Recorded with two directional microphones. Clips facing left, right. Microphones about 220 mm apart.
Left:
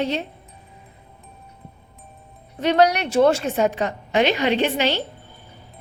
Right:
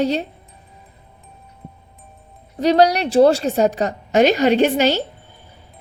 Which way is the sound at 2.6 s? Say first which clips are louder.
Right 3 dB; 35° right (ahead or behind).